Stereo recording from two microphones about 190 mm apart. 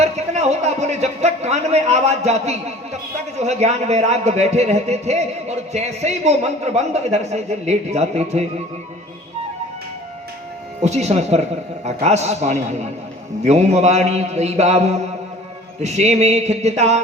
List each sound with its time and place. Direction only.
0.0 s a man's voice: 35° right (ahead or behind)
10.8 s a man's voice: 35° right (ahead or behind)